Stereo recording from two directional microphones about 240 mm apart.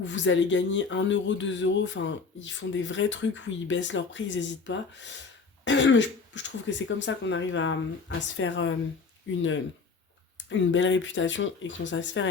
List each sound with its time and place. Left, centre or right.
0.0 s speech: left
10.3 s speech: left